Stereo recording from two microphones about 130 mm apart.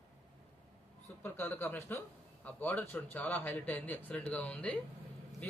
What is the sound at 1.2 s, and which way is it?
A man's voice, 15° left (ahead or behind).